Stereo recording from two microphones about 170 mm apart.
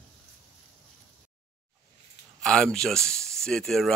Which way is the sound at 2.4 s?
5° left (ahead or behind).